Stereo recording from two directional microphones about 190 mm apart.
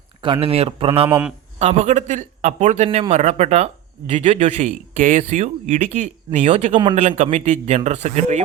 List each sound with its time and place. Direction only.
0.2 s speech: 25° right (ahead or behind)
1.0 s a man's voice: 10° right (ahead or behind)
1.5 s a man's voice: 35° right (ahead or behind)
6.7 s speech: 25° right (ahead or behind)
7.2 s a man's voice: 35° right (ahead or behind)